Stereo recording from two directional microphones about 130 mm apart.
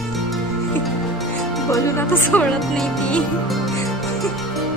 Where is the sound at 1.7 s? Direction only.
20° left (ahead or behind); by 3.6 s 5° left (ahead or behind).